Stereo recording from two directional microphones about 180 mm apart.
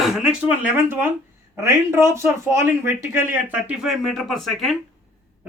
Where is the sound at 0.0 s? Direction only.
Centre (ahead or behind).